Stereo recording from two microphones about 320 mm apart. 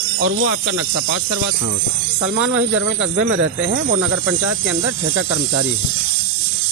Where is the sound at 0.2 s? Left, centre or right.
Right.